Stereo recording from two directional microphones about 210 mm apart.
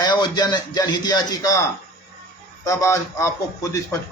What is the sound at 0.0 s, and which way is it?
A man's voice, 20° left (ahead or behind).